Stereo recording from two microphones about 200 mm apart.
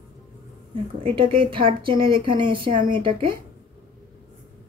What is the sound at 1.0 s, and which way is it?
Speech, 25° right (ahead or behind).